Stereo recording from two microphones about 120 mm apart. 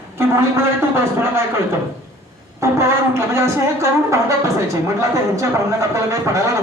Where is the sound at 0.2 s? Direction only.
20° right (ahead or behind).